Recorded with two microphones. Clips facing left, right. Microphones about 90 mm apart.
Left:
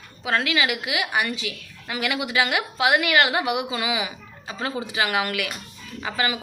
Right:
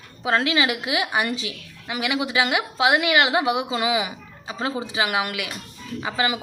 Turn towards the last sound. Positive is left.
turn(degrees=-20)  # may be behind; listen again after turning